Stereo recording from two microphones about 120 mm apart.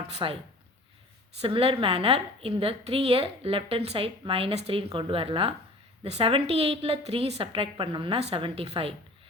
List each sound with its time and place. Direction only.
0.2 s speech: 40° right (ahead or behind)
1.4 s a woman's voice: 50° right (ahead or behind)